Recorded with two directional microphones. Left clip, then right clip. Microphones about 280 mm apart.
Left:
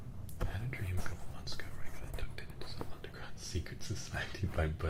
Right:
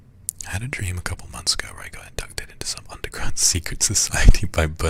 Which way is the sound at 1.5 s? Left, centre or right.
Right.